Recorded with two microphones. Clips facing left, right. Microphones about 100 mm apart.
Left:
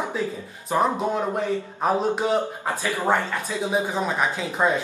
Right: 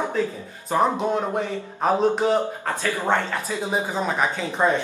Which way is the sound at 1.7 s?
5° left (ahead or behind).